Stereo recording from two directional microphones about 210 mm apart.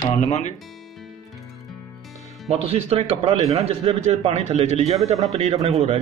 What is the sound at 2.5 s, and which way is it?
A man's voice, 30° right (ahead or behind).